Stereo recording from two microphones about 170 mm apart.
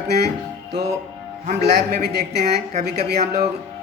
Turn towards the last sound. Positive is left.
turn(degrees=-65)  # may be behind; listen again after turning